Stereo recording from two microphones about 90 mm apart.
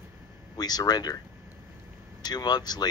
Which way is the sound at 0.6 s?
50° left (ahead or behind).